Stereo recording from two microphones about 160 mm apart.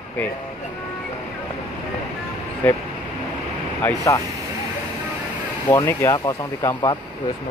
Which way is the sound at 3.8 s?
20° left (ahead or behind).